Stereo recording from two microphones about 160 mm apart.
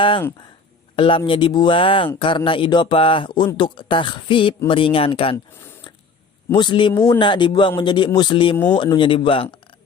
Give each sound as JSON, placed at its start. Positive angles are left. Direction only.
{"t": 0.9, "sound": "a man's voice", "side_deg": 35}
{"t": 6.5, "sound": "a man's voice", "side_deg": 30}